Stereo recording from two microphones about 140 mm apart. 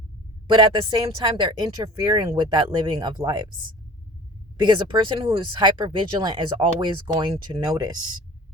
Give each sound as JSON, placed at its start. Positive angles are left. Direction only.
{"t": 0.4, "sound": "speech", "side_deg": -35}